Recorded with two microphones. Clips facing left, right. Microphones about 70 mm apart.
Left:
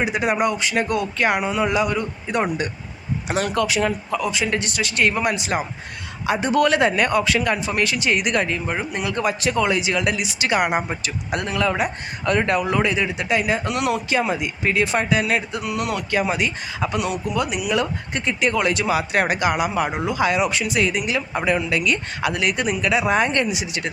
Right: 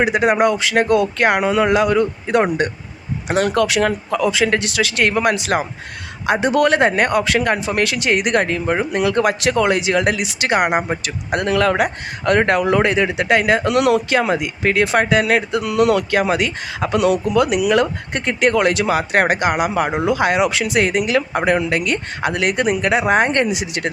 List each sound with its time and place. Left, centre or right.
0.0 s speech: right
0.3 s speech: right
1.2 s speech: right
3.2 s speech: right
6.2 s speech: right
7.1 s speech: right
18.9 s speech: right